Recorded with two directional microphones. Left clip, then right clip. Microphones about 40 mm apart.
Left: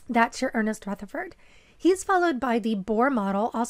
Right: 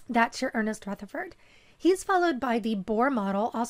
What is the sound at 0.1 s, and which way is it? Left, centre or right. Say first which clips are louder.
A woman's voice: left 2 dB; left.